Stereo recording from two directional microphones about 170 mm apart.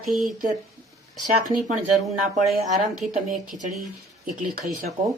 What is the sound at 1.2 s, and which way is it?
Speech, 45° right (ahead or behind).